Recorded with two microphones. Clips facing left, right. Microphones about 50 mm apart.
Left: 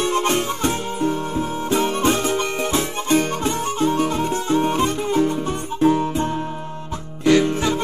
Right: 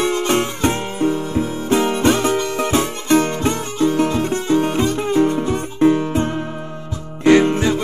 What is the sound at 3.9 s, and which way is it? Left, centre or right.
Music, right.